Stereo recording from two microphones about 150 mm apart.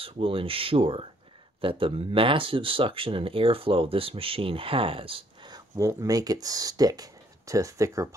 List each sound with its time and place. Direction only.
0.0 s speech: 40° right (ahead or behind)
5.8 s speech: 20° right (ahead or behind)